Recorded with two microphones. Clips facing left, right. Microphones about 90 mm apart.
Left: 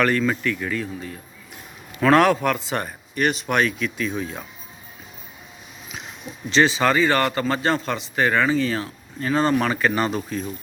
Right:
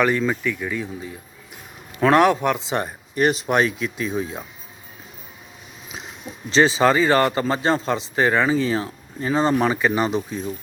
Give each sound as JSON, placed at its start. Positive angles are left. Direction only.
{"t": 0.0, "sound": "a man's voice", "side_deg": -15}
{"t": 6.5, "sound": "a man's voice", "side_deg": -30}